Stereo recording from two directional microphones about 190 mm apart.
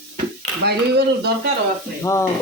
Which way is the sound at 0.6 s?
60° right (ahead or behind).